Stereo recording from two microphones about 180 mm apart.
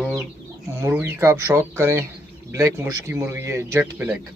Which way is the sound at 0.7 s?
15° right (ahead or behind).